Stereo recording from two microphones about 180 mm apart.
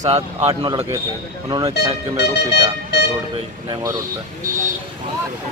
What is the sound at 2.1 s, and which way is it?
Speech, 70° left (ahead or behind).